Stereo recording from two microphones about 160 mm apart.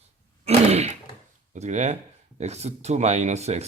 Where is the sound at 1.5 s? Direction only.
45° right (ahead or behind).